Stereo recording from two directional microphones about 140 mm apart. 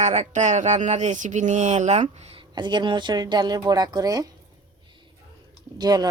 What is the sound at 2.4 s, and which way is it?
A woman's voice, 30° right (ahead or behind).